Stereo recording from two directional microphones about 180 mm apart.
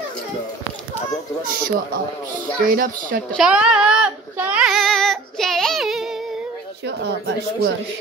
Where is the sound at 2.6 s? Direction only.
50° right (ahead or behind).